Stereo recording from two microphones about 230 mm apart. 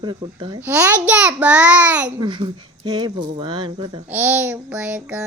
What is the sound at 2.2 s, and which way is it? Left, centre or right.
Speech, centre.